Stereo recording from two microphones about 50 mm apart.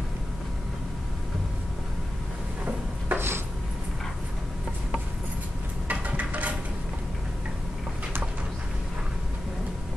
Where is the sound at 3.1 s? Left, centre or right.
Right.